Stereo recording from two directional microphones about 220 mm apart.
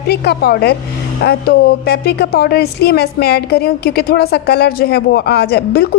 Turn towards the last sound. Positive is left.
turn(degrees=45)  # may be behind; listen again after turning